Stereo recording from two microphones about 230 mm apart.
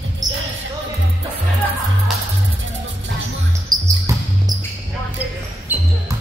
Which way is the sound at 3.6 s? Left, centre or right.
Centre.